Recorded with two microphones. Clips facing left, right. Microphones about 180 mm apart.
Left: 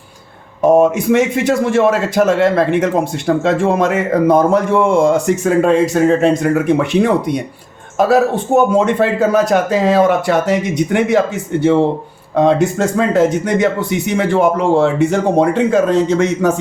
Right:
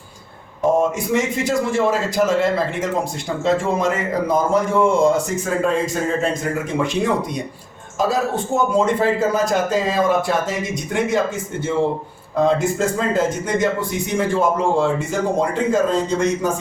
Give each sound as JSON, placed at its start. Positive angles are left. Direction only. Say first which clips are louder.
{"t": 0.8, "sound": "a man's voice", "louder": "left 7 dB", "side_deg": 65}